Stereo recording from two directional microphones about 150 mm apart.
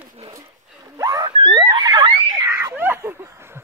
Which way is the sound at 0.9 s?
20° right (ahead or behind).